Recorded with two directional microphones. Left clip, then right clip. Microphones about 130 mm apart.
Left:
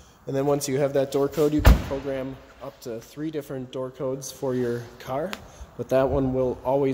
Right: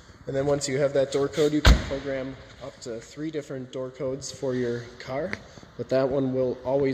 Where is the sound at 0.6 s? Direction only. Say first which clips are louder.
Left 1 dB; 35° left (ahead or behind).